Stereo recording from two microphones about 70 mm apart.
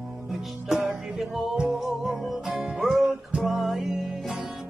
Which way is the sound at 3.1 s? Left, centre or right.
Centre.